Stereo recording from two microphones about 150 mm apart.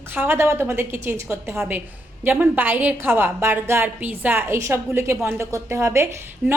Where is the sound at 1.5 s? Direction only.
5° right (ahead or behind).